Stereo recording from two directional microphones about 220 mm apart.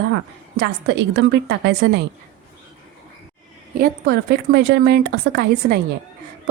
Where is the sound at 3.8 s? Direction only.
45° right (ahead or behind).